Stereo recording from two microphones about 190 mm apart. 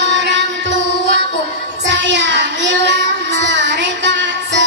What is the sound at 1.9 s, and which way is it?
Child singing, 70° right (ahead or behind).